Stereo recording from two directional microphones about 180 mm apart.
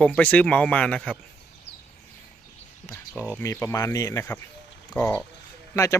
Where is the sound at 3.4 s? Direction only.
15° left (ahead or behind).